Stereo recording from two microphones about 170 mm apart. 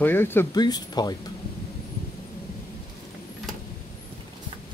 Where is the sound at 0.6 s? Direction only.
25° left (ahead or behind).